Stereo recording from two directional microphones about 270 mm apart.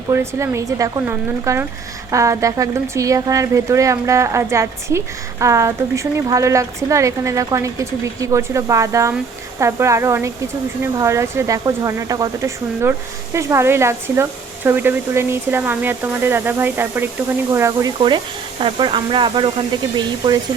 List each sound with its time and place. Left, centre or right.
0.1 s speech: centre